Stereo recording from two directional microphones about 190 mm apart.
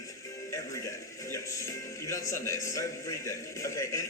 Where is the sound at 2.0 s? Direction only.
15° left (ahead or behind).